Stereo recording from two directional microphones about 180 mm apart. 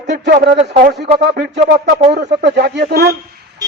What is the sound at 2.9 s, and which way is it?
Speech, 60° right (ahead or behind).